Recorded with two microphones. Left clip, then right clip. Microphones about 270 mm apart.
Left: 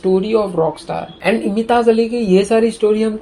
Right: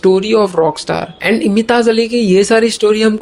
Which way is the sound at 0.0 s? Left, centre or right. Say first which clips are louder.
Right 5 dB; right.